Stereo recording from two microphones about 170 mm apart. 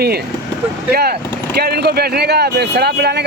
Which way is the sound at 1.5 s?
70° right (ahead or behind).